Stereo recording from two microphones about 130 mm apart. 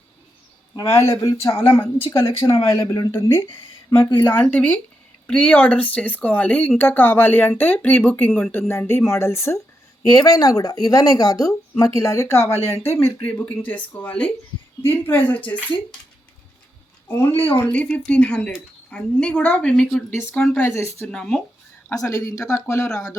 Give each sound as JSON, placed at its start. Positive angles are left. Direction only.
{"t": 0.8, "sound": "speech", "side_deg": 20}
{"t": 2.5, "sound": "speech", "side_deg": 45}
{"t": 2.8, "sound": "speech", "side_deg": 30}
{"t": 3.1, "sound": "speech", "side_deg": 20}
{"t": 4.3, "sound": "speech", "side_deg": 15}
{"t": 17.1, "sound": "speech", "side_deg": 20}
{"t": 20.7, "sound": "speech", "side_deg": 20}
{"t": 21.1, "sound": "speech", "side_deg": 5}
{"t": 21.8, "sound": "speech", "side_deg": 25}